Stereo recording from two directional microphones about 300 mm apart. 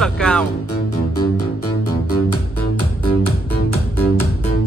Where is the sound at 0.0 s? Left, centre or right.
Centre.